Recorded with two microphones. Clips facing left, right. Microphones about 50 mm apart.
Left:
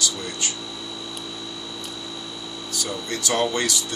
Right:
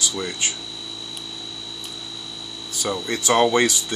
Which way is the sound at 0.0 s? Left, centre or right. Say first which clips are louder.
Right 2 dB; right.